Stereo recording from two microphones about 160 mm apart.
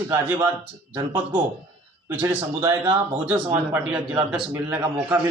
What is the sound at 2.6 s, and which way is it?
Speech, 25° right (ahead or behind).